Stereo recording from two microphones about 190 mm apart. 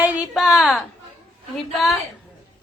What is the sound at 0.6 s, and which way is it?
Speech, centre (ahead or behind).